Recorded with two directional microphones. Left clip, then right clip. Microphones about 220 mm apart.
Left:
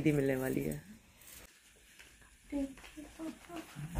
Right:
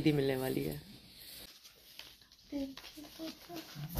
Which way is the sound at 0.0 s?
Centre (ahead or behind).